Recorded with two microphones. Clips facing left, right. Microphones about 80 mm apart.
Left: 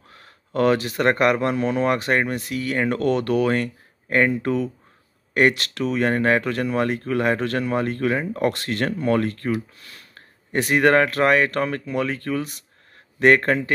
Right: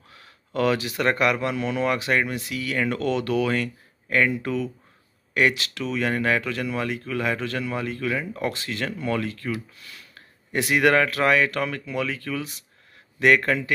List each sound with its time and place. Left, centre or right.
0.1 s speech: left
8.4 s speech: left